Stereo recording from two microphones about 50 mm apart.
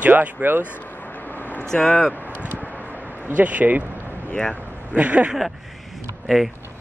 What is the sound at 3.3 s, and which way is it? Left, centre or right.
Speech, right.